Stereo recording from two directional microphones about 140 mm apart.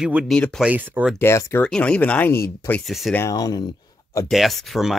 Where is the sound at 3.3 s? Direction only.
30° left (ahead or behind).